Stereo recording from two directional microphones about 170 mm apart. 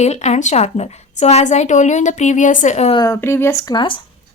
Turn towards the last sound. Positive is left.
turn(degrees=30)  # may be behind; listen again after turning